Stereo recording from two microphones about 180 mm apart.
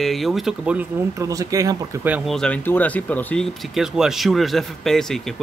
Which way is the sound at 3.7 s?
Centre (ahead or behind).